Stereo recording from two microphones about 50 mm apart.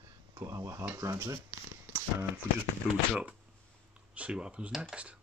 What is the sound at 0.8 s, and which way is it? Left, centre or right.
Speech, right.